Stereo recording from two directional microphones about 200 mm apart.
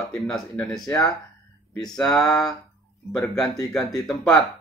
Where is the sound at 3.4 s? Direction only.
15° left (ahead or behind).